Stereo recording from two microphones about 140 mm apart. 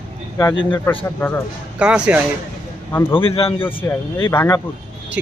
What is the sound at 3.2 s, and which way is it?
Speech, 40° left (ahead or behind).